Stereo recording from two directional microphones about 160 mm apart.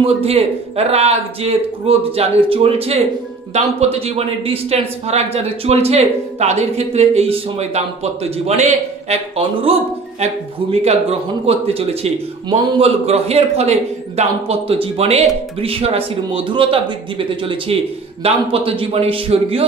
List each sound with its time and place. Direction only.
0.0 s speech: 40° right (ahead or behind)